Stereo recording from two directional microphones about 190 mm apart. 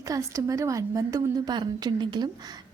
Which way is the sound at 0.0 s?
15° right (ahead or behind).